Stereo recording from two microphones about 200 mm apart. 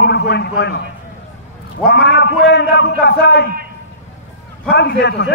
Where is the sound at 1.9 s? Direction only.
55° left (ahead or behind).